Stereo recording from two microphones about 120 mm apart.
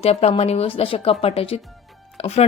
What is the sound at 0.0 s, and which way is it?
A woman's voice, 60° left (ahead or behind).